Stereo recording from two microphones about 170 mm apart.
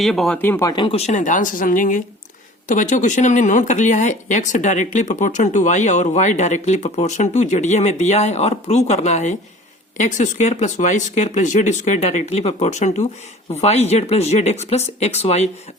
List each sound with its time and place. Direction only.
0.0 s speech: centre (ahead or behind)
0.7 s speech: 30° left (ahead or behind)